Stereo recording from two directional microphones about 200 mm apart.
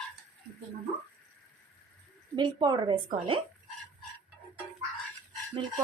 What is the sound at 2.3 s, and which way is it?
A woman's voice, 20° right (ahead or behind).